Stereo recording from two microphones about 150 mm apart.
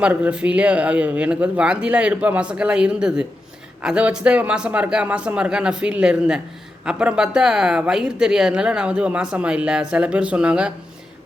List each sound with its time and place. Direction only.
0.0 s speech: 10° right (ahead or behind)